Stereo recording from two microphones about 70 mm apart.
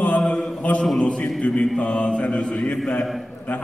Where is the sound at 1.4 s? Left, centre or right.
Centre.